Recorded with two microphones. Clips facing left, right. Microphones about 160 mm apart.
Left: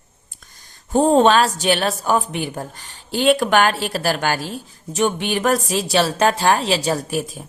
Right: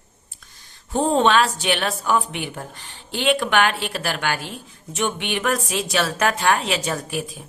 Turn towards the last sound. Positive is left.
turn(degrees=40)  # may be behind; listen again after turning